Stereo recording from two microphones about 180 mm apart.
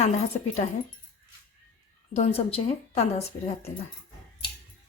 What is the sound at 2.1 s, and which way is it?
A woman's voice, 35° left (ahead or behind).